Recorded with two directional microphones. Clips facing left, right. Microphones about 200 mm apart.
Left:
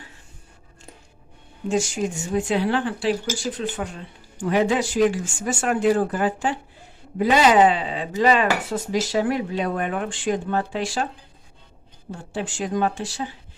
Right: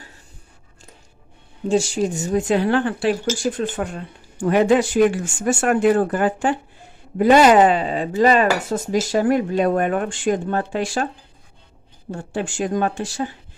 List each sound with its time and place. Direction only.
1.6 s speech: 30° right (ahead or behind); by 11.1 s 50° right (ahead or behind)
12.1 s speech: 50° right (ahead or behind)